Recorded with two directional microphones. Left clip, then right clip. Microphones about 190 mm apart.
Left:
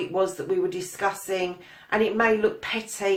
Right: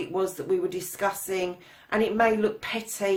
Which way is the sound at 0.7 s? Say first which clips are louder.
Left 1 dB; 40° right (ahead or behind).